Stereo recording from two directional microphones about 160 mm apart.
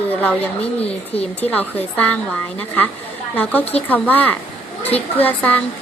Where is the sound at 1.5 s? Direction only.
10° left (ahead or behind).